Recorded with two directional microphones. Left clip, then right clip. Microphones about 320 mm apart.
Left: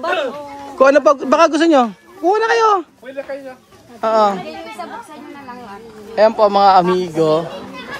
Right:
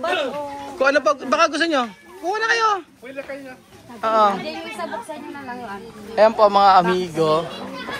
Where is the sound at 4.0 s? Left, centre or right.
Centre.